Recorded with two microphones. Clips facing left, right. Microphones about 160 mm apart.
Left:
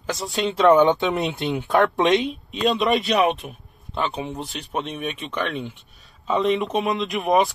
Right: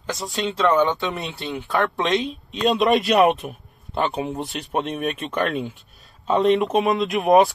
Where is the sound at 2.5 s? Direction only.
Centre (ahead or behind).